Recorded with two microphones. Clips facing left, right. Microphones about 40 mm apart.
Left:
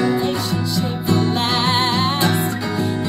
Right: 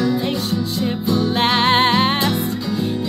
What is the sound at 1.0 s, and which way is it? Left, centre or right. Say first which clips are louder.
Music: left 1 dB; left.